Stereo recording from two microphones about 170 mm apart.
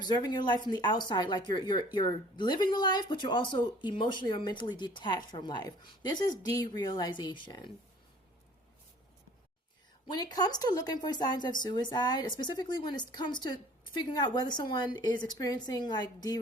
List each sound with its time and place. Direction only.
0.0 s speech: 25° left (ahead or behind)
10.1 s speech: 25° left (ahead or behind)